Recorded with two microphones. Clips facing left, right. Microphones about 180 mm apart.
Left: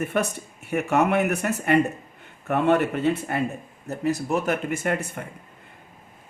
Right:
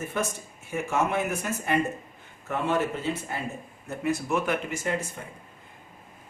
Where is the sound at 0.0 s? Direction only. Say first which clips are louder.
Left 5 dB; 65° left (ahead or behind).